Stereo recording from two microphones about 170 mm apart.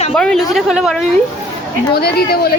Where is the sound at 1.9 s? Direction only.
70° left (ahead or behind).